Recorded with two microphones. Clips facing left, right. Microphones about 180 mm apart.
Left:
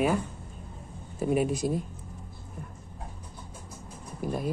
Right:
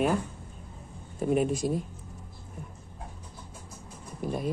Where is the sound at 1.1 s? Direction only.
5° left (ahead or behind).